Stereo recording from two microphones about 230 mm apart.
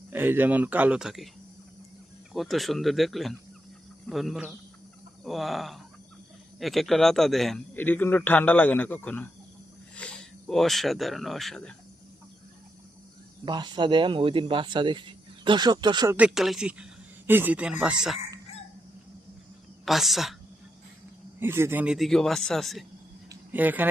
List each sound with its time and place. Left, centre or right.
0.1 s speech: centre
2.3 s a man's voice: centre
13.4 s speech: centre
16.1 s speech: centre
19.8 s speech: centre
21.3 s speech: centre
23.3 s a sound: centre